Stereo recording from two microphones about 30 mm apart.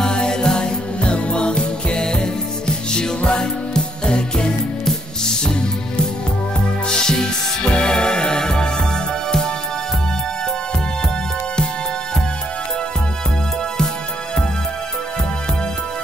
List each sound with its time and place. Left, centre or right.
0.0 s music: left
6.9 s music: left